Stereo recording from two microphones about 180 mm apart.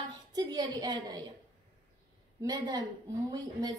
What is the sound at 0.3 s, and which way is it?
Speech, 20° right (ahead or behind).